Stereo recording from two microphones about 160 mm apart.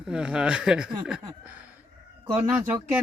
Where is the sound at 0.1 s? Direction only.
5° right (ahead or behind).